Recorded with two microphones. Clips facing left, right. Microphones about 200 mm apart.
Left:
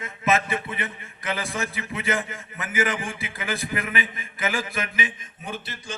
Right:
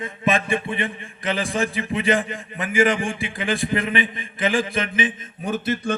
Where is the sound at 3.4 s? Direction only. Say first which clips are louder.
Right 6 dB; 20° right (ahead or behind).